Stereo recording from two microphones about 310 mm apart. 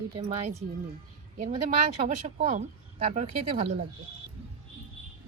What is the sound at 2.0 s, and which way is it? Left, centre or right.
Speech, right.